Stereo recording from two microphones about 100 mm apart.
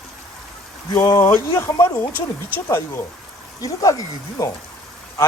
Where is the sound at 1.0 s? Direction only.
25° left (ahead or behind).